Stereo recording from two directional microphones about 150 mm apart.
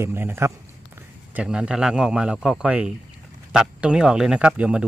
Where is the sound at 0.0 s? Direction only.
15° right (ahead or behind).